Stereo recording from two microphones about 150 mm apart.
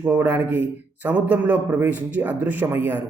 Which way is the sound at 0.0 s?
10° right (ahead or behind).